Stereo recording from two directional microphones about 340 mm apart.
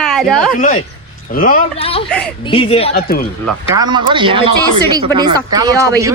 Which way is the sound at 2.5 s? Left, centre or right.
Centre.